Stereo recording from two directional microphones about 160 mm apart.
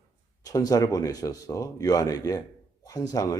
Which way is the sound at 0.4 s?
20° left (ahead or behind).